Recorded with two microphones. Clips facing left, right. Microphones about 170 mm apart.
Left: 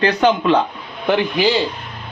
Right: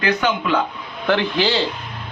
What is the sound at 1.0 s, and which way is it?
Speech, 15° left (ahead or behind).